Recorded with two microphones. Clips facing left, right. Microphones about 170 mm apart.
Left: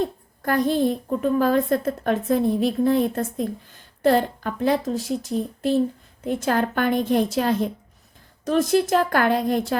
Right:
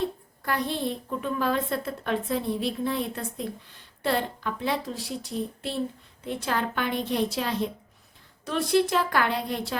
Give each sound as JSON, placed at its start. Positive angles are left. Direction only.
{"t": 0.0, "sound": "a woman's voice", "side_deg": 45}